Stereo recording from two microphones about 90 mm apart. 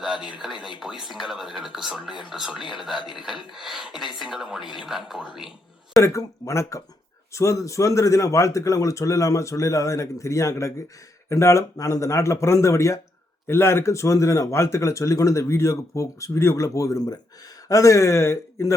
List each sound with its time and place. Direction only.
0.0 s speech: 10° right (ahead or behind)
6.0 s speech: 35° left (ahead or behind)